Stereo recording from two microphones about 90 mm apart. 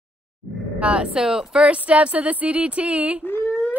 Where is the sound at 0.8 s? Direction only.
10° right (ahead or behind).